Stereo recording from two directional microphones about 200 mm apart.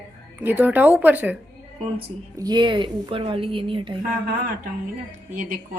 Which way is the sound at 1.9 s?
20° right (ahead or behind).